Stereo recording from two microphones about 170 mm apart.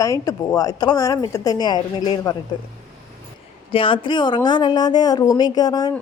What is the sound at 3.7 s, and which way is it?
Speech, 30° left (ahead or behind).